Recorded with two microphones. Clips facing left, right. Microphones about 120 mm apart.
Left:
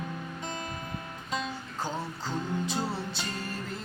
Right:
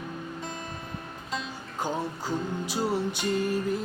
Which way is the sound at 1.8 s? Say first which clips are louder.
Right 4 dB; 15° right (ahead or behind).